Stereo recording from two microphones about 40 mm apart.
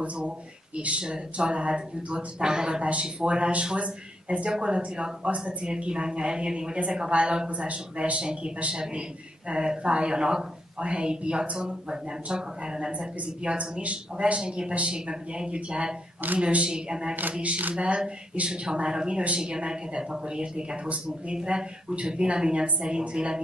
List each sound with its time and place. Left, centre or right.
0.7 s speech: right
2.8 s speech: right
9.5 s speech: right